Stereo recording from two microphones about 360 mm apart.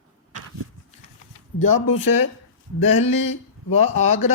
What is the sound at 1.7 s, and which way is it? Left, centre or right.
Speech, left.